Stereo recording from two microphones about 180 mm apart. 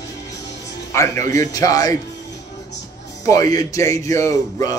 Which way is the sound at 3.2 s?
20° left (ahead or behind).